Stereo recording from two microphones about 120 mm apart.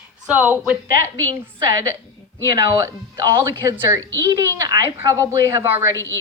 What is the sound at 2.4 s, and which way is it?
A woman's voice, 30° right (ahead or behind).